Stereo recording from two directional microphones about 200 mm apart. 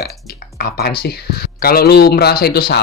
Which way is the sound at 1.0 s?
50° left (ahead or behind).